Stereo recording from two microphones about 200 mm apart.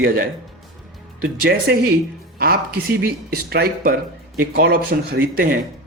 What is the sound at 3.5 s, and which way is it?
Speech, 50° right (ahead or behind).